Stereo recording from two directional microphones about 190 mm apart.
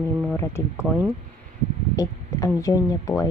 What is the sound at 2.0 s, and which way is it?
Speech, 15° left (ahead or behind).